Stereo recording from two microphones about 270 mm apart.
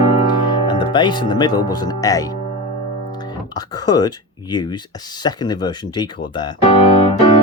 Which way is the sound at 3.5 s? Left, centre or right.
Centre.